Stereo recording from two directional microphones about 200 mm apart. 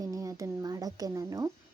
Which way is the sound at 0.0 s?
15° right (ahead or behind).